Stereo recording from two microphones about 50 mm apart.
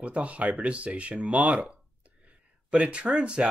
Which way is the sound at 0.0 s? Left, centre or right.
Right.